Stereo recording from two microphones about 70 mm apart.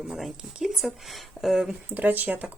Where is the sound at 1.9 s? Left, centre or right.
Right.